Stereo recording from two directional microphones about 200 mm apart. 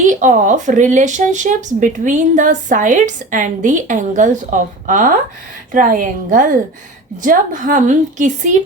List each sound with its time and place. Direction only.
0.0 s speech: 40° right (ahead or behind)